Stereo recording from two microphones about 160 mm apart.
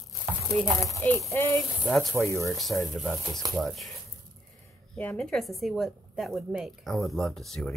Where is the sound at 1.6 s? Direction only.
5° left (ahead or behind).